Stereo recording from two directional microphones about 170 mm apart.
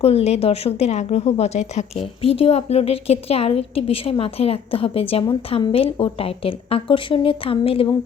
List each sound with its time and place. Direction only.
0.0 s a woman's voice: 35° left (ahead or behind)